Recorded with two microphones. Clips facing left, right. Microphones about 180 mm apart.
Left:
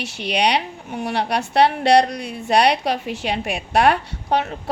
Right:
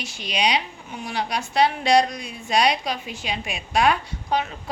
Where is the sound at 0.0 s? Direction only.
65° left (ahead or behind).